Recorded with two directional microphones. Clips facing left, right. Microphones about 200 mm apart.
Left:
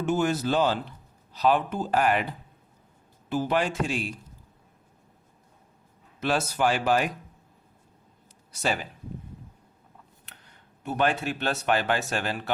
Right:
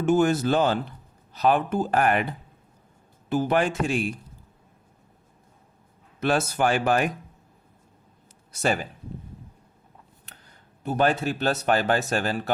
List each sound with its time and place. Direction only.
0.1 s speech: 50° right (ahead or behind)
3.2 s speech: 50° right (ahead or behind)
6.1 s speech: 50° right (ahead or behind)
8.6 s speech: 45° right (ahead or behind)
10.8 s speech: 40° right (ahead or behind)